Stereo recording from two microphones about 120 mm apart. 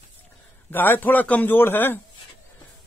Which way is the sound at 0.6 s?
15° left (ahead or behind).